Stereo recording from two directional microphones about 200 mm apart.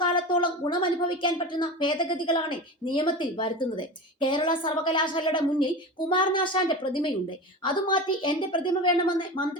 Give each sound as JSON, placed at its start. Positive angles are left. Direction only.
{"t": 0.1, "sound": "a woman's voice", "side_deg": 25}